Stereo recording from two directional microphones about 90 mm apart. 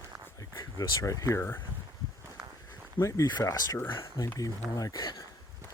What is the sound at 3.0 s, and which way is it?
Speech, 70° left (ahead or behind).